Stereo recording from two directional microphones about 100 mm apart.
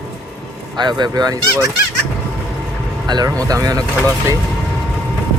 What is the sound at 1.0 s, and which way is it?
Speech, 40° right (ahead or behind).